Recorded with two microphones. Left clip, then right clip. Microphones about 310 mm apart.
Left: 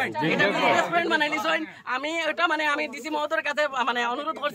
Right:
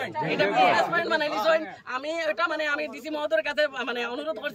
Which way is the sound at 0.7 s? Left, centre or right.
Centre.